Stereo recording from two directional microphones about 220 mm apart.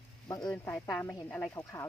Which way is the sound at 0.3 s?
15° left (ahead or behind).